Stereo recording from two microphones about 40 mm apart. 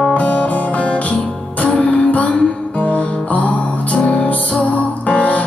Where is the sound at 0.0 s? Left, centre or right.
Left.